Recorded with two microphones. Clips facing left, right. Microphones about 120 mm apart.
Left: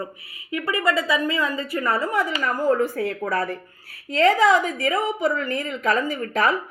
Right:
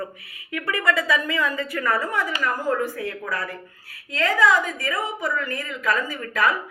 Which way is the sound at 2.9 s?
35° left (ahead or behind).